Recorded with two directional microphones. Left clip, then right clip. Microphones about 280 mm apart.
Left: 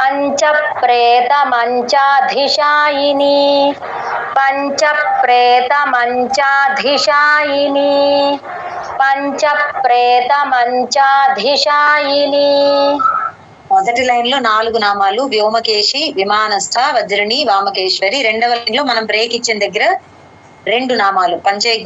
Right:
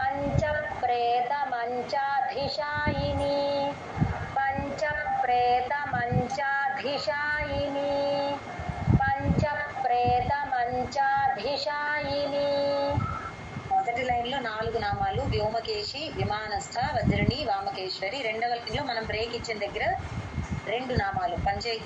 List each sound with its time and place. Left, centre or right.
0.0 s a woman's voice: left